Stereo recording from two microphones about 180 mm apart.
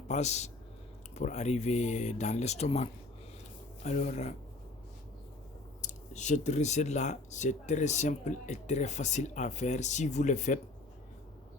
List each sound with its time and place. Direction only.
0.1 s speech: 40° left (ahead or behind)
5.8 s speech: 40° left (ahead or behind)